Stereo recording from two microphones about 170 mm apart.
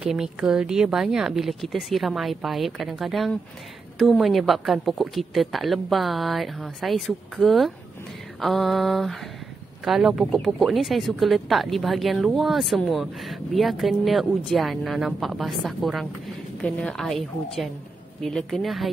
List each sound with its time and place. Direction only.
0.0 s speech: 5° right (ahead or behind)